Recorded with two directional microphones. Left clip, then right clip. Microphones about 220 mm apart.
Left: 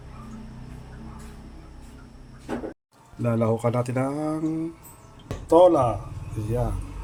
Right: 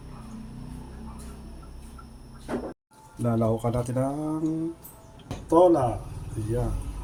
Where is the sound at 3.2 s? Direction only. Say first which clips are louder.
Left 2 dB; 30° left (ahead or behind).